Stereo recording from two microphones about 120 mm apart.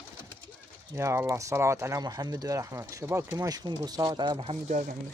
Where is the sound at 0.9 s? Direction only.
25° right (ahead or behind); by 4.5 s 40° right (ahead or behind).